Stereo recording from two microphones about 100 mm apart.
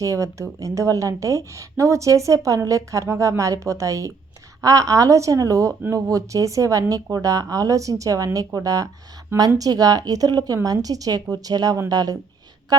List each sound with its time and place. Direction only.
0.0 s a woman's voice: 30° right (ahead or behind)